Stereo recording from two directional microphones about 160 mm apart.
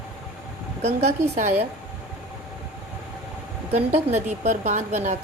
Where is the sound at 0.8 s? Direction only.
40° right (ahead or behind).